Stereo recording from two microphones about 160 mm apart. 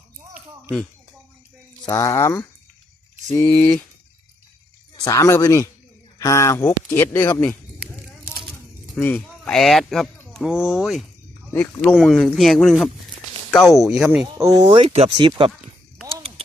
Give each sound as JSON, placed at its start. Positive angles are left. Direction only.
{"t": 1.8, "sound": "a woman's voice", "side_deg": 20}
{"t": 5.0, "sound": "a woman's voice", "side_deg": 20}
{"t": 9.0, "sound": "speech", "side_deg": 10}
{"t": 11.5, "sound": "speech", "side_deg": 15}
{"t": 11.9, "sound": "speech", "side_deg": 0}
{"t": 14.3, "sound": "speech", "side_deg": -20}
{"t": 14.7, "sound": "speech", "side_deg": -35}